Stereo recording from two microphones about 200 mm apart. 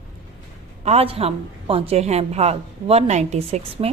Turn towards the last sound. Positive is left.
turn(degrees=-35)  # may be behind; listen again after turning